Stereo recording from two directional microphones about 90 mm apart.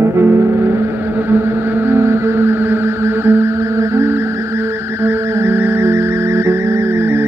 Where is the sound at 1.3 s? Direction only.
25° right (ahead or behind).